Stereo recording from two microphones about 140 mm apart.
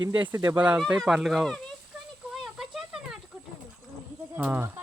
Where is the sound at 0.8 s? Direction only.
Centre (ahead or behind).